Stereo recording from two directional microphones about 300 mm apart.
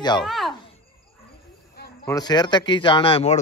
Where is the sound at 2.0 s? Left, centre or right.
Centre.